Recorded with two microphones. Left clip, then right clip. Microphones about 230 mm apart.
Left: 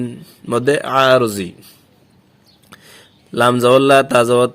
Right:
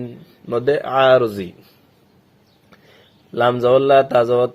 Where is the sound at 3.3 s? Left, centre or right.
Left.